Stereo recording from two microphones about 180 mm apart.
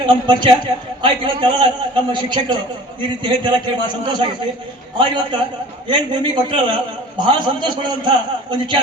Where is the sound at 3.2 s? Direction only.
25° right (ahead or behind).